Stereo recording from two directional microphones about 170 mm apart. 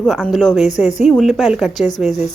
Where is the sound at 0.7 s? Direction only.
45° left (ahead or behind).